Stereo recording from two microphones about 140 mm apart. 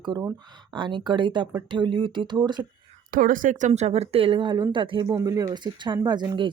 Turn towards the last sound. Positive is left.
turn(degrees=-30)  # may be behind; listen again after turning